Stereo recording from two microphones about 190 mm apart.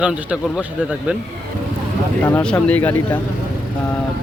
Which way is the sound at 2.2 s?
5° left (ahead or behind).